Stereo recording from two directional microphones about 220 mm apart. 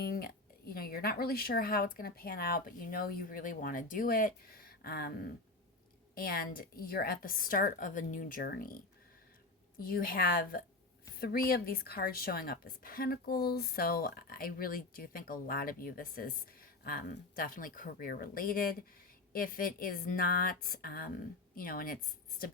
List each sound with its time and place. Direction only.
0.0 s a woman's voice: 45° left (ahead or behind)
9.9 s a woman's voice: 40° left (ahead or behind)